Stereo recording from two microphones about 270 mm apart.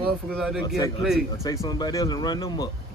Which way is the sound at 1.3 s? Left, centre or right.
Centre.